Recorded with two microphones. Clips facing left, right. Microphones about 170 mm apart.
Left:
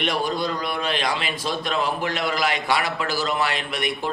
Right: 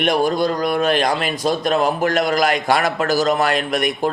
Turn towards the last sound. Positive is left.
turn(degrees=-45)  # may be behind; listen again after turning